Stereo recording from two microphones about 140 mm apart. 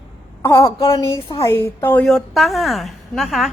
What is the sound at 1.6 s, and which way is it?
Speech, 15° left (ahead or behind).